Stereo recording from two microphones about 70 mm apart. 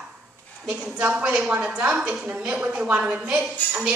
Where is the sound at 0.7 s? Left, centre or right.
Centre.